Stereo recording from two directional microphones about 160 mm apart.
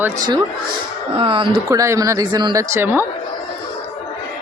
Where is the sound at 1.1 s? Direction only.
30° right (ahead or behind).